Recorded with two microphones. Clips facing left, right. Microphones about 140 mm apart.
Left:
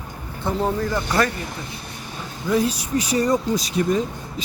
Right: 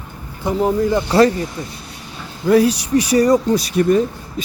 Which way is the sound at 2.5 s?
75° right (ahead or behind).